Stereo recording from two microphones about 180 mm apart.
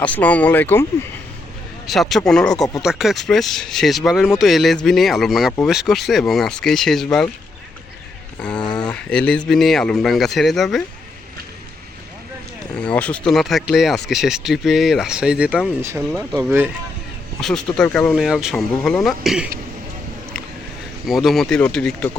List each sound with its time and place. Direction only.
0.0 s speech: 10° left (ahead or behind)
1.9 s speech: centre (ahead or behind)
8.5 s a sound: 25° left (ahead or behind)
8.9 s speech: 5° left (ahead or behind)
12.7 s speech: 5° left (ahead or behind); by 16.7 s 10° right (ahead or behind)
17.4 s speech: 5° left (ahead or behind)
18.2 s speech: centre (ahead or behind)
21.1 s speech: centre (ahead or behind)